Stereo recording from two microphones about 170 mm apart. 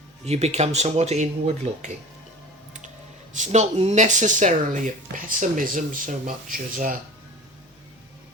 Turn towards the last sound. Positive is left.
turn(degrees=-50)  # may be behind; listen again after turning